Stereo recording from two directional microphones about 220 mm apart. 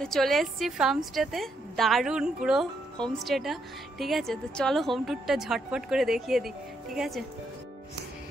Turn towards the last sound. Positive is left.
turn(degrees=0)  # may be behind; listen again after turning